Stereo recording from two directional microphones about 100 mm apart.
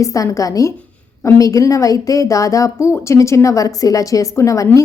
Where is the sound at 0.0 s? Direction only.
35° left (ahead or behind).